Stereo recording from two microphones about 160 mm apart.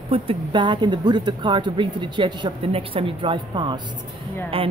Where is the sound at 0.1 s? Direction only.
30° right (ahead or behind).